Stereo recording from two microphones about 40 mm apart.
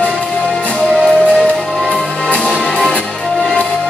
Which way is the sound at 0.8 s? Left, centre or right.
Centre.